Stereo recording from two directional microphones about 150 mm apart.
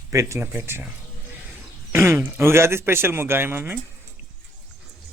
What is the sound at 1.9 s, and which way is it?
Speech, 15° right (ahead or behind).